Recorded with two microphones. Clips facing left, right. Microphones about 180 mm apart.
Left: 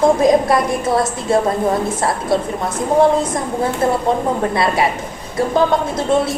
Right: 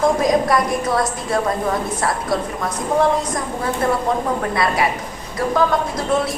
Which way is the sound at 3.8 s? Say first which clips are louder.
Left 2 dB; 25° left (ahead or behind).